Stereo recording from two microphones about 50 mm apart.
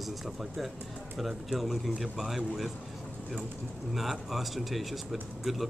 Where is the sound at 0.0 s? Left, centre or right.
Centre.